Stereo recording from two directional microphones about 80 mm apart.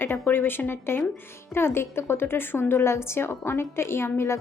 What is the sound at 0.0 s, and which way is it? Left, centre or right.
A woman's voice, left.